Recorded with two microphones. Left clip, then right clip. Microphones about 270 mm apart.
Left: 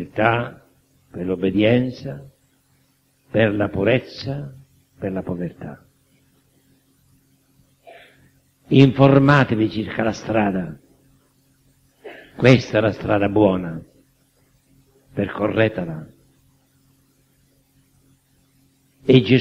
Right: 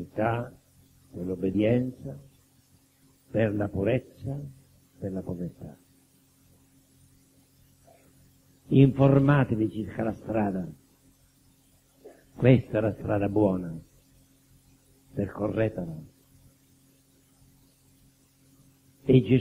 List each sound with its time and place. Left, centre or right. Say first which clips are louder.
0.1 s a man's voice: left 10 dB; left
3.3 s a man's voice: left 9 dB; left
8.6 s a man's voice: left 8 dB; left
12.4 s a man's voice: left 8 dB; left
15.1 s a man's voice: left 9 dB; left
19.0 s a man's voice: left 8 dB; left